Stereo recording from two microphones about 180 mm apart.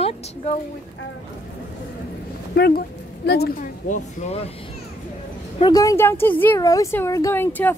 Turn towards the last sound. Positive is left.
turn(degrees=10)  # may be behind; listen again after turning